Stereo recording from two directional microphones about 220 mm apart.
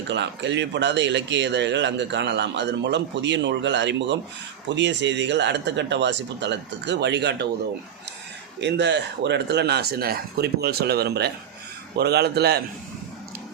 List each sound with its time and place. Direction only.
0.1 s a man's voice: 55° right (ahead or behind)
8.6 s a man's voice: 50° right (ahead or behind)